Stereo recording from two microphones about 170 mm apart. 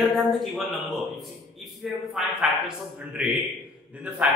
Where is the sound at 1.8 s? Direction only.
5° right (ahead or behind).